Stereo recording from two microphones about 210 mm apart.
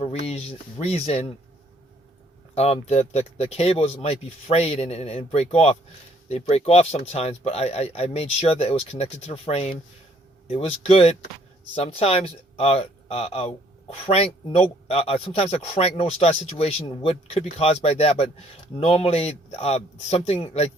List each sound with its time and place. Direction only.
0.0 s speech: 30° left (ahead or behind)
2.6 s a man's voice: 30° left (ahead or behind)